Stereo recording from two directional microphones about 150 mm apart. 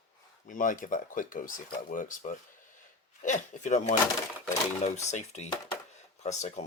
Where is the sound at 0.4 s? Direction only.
60° left (ahead or behind).